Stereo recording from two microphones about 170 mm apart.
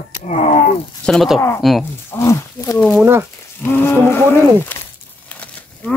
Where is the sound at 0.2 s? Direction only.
45° left (ahead or behind).